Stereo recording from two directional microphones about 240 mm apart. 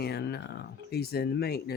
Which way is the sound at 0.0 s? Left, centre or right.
Left.